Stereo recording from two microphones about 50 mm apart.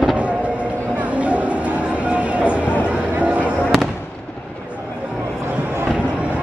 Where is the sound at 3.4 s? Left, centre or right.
Left.